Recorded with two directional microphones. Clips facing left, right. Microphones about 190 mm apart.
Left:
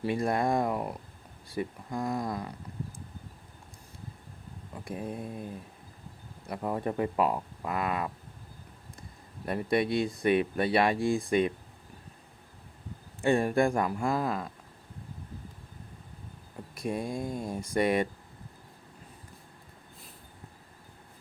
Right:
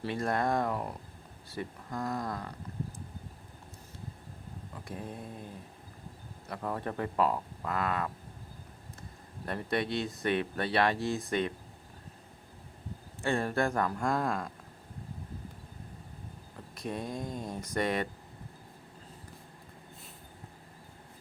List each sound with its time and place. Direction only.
0.0 s speech: 10° left (ahead or behind)
4.9 s speech: 15° left (ahead or behind)
6.5 s speech: 15° left (ahead or behind)
9.5 s speech: 10° left (ahead or behind)
13.2 s speech: 15° left (ahead or behind)
16.7 s speech: 10° left (ahead or behind)